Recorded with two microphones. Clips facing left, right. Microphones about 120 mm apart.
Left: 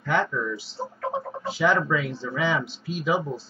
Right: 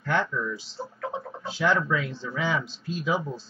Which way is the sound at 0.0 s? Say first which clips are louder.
Left 2 dB; centre (ahead or behind).